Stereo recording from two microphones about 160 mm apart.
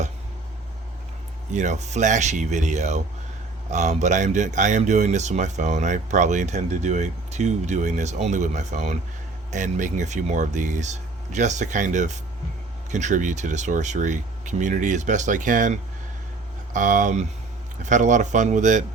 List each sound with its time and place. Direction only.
1.5 s speech: 45° right (ahead or behind)